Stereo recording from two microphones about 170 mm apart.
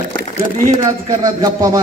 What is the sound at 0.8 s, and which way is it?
Speech, 20° right (ahead or behind).